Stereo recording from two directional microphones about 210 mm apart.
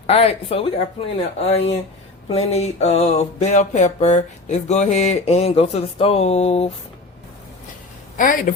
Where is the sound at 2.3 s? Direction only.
30° left (ahead or behind).